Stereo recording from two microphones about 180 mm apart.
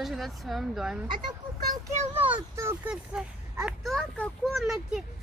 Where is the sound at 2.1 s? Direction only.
25° right (ahead or behind).